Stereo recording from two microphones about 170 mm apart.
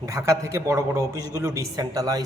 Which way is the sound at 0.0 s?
20° right (ahead or behind).